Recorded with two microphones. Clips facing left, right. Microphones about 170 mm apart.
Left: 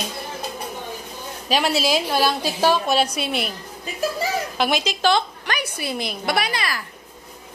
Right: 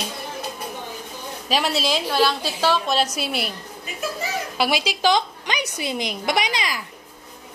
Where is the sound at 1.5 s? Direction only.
Centre (ahead or behind).